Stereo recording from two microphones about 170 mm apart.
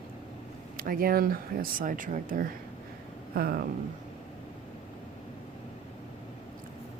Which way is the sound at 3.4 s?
60° right (ahead or behind).